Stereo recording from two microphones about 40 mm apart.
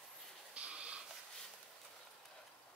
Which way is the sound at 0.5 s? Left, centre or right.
Right.